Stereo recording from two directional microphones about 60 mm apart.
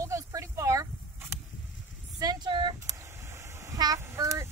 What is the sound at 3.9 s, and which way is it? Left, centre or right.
Speech, right.